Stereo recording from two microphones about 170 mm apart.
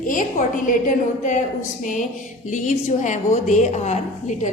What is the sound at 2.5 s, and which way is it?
A woman's voice, 50° left (ahead or behind).